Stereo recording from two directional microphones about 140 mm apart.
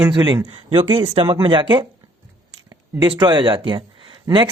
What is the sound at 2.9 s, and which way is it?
Speech, 30° right (ahead or behind).